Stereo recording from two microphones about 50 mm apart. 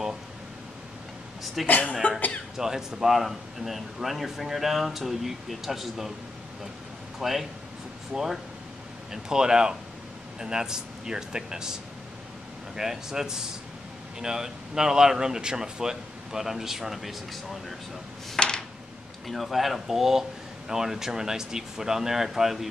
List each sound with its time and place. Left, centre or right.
1.4 s a woman's voice: centre
1.7 s speech: left
2.5 s speech: centre
7.2 s speech: centre
18.3 s a sound: centre
19.2 s speech: centre